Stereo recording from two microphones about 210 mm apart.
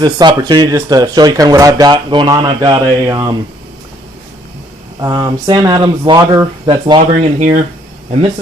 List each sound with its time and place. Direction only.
0.0 s speech: 20° right (ahead or behind)
4.9 s speech: 15° right (ahead or behind); by 7.6 s 35° right (ahead or behind)